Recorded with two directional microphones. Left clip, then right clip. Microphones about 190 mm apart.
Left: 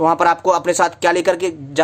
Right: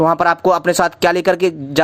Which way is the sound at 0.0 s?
30° right (ahead or behind).